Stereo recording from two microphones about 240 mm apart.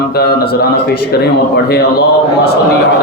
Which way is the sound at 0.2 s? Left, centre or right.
Left.